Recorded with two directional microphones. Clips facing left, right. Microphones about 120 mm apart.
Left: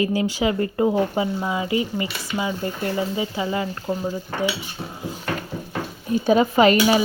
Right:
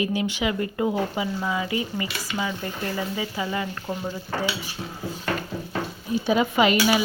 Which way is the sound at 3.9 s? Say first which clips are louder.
Left 7 dB; 15° left (ahead or behind).